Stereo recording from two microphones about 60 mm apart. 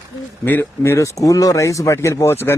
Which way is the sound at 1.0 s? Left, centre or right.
Left.